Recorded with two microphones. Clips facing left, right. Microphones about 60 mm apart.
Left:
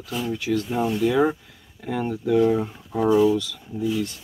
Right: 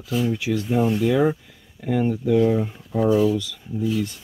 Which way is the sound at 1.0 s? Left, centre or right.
Centre.